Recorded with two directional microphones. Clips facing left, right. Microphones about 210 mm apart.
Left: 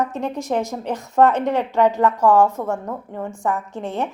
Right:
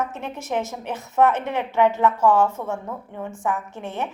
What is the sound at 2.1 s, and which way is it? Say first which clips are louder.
Speech: left 3 dB; 40° left (ahead or behind).